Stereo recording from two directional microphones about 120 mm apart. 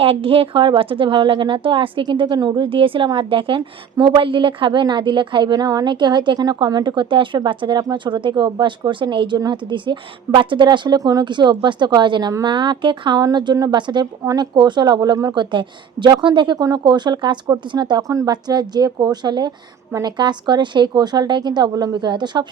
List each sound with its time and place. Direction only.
0.0 s a woman's voice: 50° right (ahead or behind)